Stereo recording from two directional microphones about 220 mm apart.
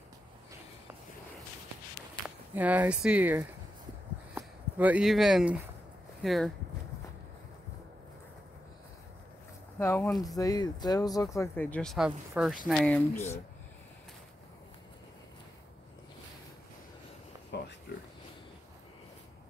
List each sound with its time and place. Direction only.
2.2 s speech: 5° right (ahead or behind)
9.8 s speech: 10° left (ahead or behind)